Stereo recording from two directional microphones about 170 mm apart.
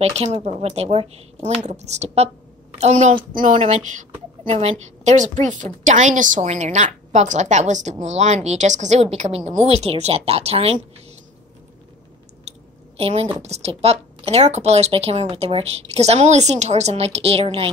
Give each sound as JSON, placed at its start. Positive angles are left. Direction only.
{"t": 0.1, "sound": "a woman's voice", "side_deg": -35}
{"t": 12.4, "sound": "a sound", "side_deg": -35}
{"t": 13.4, "sound": "speech", "side_deg": -40}